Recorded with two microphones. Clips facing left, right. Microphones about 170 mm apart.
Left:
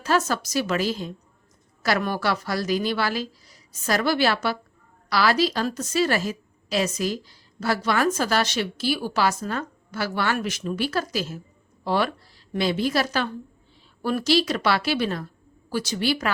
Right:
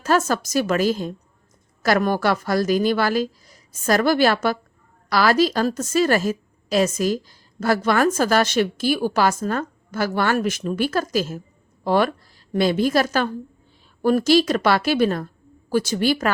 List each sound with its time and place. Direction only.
0.0 s a woman's voice: 45° right (ahead or behind)